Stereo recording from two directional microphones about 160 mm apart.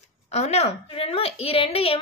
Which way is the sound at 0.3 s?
40° left (ahead or behind).